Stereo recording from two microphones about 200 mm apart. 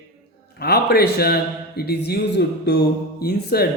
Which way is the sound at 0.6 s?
50° left (ahead or behind).